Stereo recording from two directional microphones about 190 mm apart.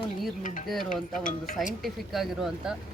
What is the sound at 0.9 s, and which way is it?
Speech, 45° left (ahead or behind).